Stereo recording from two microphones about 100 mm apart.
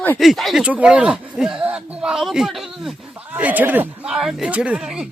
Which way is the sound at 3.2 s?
15° right (ahead or behind).